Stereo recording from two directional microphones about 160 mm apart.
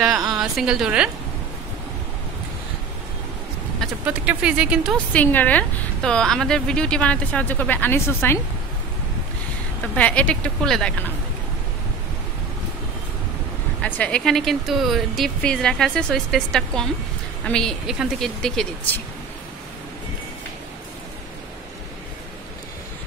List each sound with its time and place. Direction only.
0.0 s a woman's voice: 20° right (ahead or behind)
0.3 s a woman's voice: 5° right (ahead or behind)
3.8 s speech: 10° right (ahead or behind)
4.9 s a woman's voice: 10° left (ahead or behind)
9.9 s a woman's voice: 10° left (ahead or behind)
13.8 s speech: 10° left (ahead or behind)